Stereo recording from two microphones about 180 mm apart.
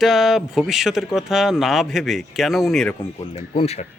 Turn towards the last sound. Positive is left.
turn(degrees=35)  # may be behind; listen again after turning